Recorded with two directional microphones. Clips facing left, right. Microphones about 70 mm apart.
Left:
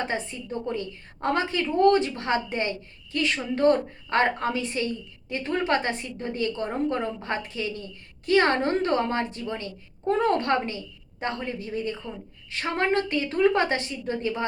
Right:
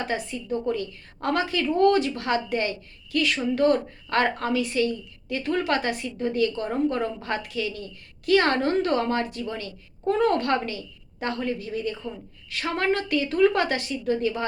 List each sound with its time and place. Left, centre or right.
0.1 s a woman's voice: left